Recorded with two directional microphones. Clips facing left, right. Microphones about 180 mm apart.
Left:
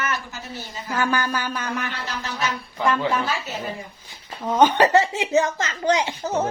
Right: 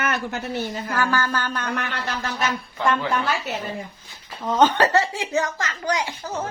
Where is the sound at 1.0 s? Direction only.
15° left (ahead or behind).